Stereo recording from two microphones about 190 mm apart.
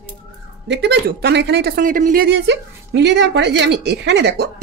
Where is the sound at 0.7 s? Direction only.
65° right (ahead or behind); by 2.3 s 45° right (ahead or behind).